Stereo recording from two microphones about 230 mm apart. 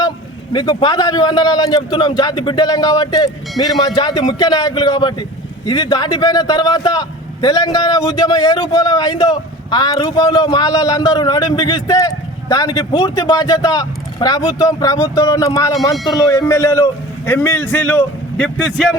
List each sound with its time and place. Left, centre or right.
0.5 s a man's voice: centre